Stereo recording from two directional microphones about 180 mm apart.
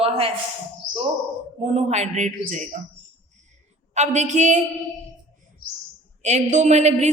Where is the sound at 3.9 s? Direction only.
40° right (ahead or behind).